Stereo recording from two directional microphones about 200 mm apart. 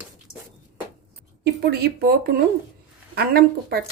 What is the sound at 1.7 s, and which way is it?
A woman's voice, 50° right (ahead or behind).